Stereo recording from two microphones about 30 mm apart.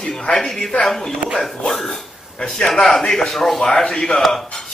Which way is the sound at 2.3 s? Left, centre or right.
Left.